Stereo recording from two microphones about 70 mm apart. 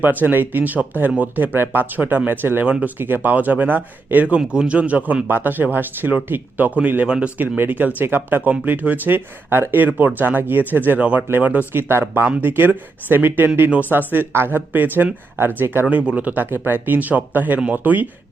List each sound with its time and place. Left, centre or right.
0.0 s speech: right